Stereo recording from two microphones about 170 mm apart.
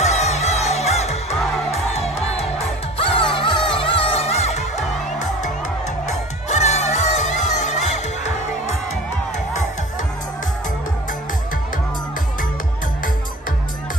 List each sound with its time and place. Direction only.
0.0 s music: 40° left (ahead or behind)
6.6 s music: 40° left (ahead or behind)